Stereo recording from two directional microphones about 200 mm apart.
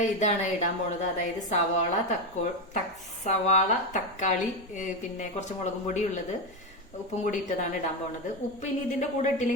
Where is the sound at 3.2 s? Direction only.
35° left (ahead or behind).